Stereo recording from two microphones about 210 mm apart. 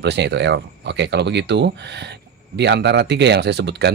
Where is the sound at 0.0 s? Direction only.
55° right (ahead or behind).